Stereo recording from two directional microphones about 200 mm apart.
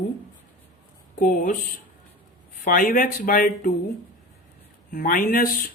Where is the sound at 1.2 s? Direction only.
40° left (ahead or behind).